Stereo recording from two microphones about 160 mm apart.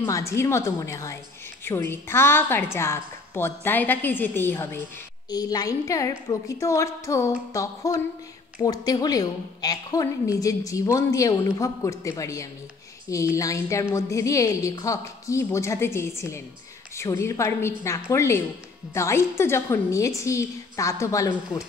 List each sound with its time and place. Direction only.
0.0 s a woman's voice: 20° left (ahead or behind)
5.3 s a woman's voice: 25° left (ahead or behind)